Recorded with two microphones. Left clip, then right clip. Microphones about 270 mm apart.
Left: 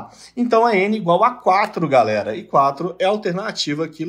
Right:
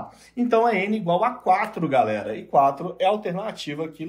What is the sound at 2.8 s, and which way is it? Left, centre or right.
Speech, left.